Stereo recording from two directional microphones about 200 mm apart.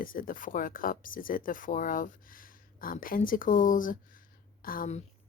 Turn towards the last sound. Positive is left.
turn(degrees=45)  # may be behind; listen again after turning